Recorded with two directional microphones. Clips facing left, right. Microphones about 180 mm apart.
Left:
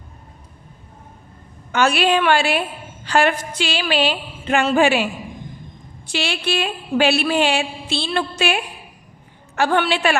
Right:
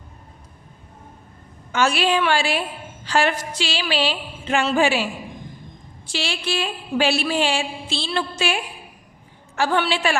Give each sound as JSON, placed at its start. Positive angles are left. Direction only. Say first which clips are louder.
{"t": 1.7, "sound": "a woman's voice", "louder": "left 3 dB", "side_deg": 60}
{"t": 6.1, "sound": "a woman's voice", "louder": "left 3 dB", "side_deg": 60}